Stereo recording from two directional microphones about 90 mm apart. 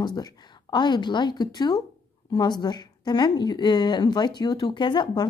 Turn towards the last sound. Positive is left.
turn(degrees=55)  # may be behind; listen again after turning